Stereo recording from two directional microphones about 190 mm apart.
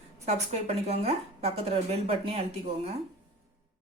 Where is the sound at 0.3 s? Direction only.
35° right (ahead or behind).